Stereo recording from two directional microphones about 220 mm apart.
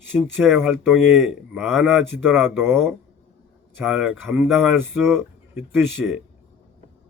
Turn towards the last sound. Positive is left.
turn(degrees=-10)  # may be behind; listen again after turning